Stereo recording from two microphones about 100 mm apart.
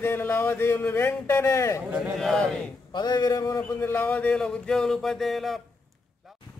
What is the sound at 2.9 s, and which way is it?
Speech, 45° left (ahead or behind).